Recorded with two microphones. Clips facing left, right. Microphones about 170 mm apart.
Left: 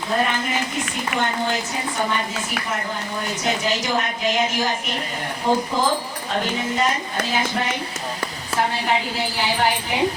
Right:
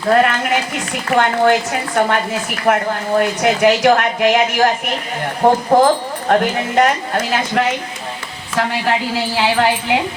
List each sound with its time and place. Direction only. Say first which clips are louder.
0.1 s speech: right 9 dB; 75° right (ahead or behind)
3.2 s a woman's voice: right 11 dB; 70° right (ahead or behind); by 10.0 s 90° right